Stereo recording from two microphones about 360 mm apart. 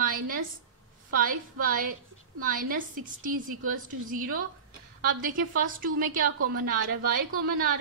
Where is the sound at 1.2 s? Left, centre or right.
Right.